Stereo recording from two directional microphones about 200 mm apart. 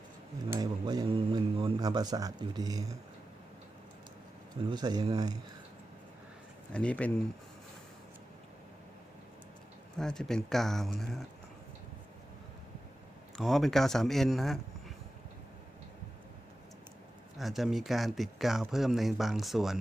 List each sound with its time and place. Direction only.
0.5 s speech: 20° right (ahead or behind)
4.7 s speech: 20° right (ahead or behind)
6.7 s speech: 5° left (ahead or behind)
10.0 s speech: centre (ahead or behind)
13.3 s speech: centre (ahead or behind)
17.3 s speech: centre (ahead or behind)